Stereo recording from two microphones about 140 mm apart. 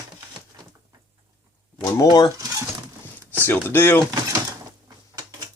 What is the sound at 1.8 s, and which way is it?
Speech, 25° left (ahead or behind).